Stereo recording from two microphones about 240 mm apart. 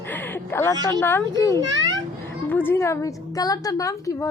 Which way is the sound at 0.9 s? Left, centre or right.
Centre.